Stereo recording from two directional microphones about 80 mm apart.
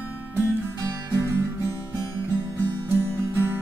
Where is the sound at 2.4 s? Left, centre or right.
Right.